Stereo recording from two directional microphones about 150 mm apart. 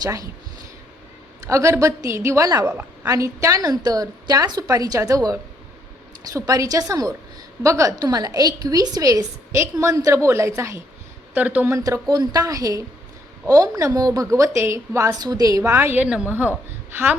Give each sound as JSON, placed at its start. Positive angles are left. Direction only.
{"t": 0.0, "sound": "a woman's voice", "side_deg": -25}
{"t": 1.5, "sound": "a woman's voice", "side_deg": -20}
{"t": 2.6, "sound": "a woman's voice", "side_deg": -15}
{"t": 12.0, "sound": "a woman's voice", "side_deg": -25}